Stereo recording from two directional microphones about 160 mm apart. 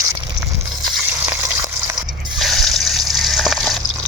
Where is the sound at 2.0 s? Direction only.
Centre (ahead or behind).